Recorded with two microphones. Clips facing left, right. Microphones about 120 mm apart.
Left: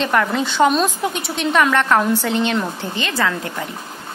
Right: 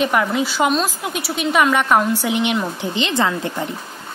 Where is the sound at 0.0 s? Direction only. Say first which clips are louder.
Even; 10° right (ahead or behind).